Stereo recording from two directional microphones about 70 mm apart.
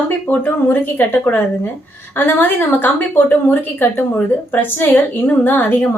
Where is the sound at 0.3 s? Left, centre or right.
Left.